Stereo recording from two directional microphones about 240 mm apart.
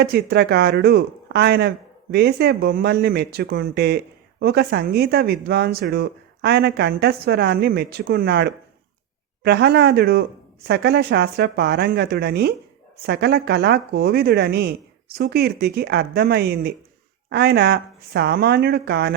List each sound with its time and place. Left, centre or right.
0.0 s speech: right